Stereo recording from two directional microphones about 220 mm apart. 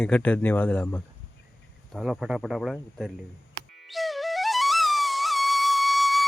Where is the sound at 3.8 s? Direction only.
Centre (ahead or behind).